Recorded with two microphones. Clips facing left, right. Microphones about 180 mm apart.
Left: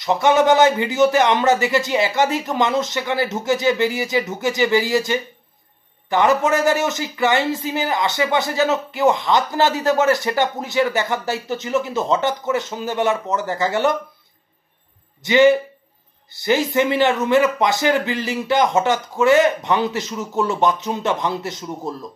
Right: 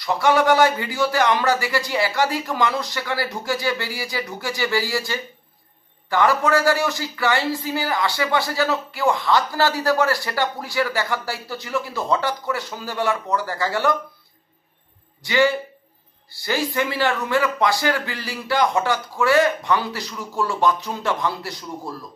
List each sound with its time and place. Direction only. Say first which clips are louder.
0.0 s speech: left 3 dB; 20° left (ahead or behind)
15.2 s speech: left 6 dB; 20° left (ahead or behind)